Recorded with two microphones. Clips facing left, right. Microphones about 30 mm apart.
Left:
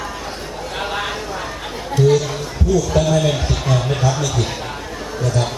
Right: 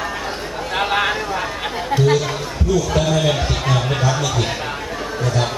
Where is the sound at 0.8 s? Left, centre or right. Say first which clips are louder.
Right 5 dB; right.